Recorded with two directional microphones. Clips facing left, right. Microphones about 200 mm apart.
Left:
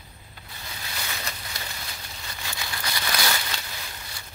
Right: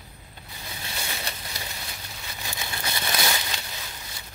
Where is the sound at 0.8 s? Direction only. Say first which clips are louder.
Right 1 dB; 25° right (ahead or behind).